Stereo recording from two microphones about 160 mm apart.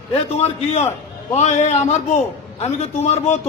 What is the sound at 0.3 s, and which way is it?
A man's voice, 45° left (ahead or behind).